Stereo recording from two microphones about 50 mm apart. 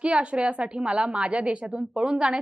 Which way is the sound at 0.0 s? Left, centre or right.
Right.